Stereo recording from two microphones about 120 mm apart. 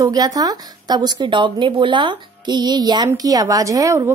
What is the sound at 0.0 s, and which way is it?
Speech, 30° right (ahead or behind).